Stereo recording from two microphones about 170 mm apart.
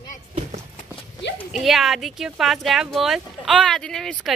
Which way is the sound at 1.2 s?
90° left.